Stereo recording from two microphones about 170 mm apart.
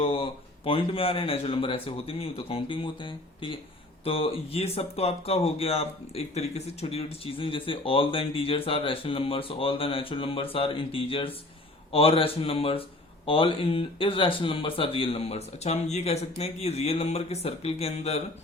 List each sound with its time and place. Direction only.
0.0 s speech: 35° left (ahead or behind)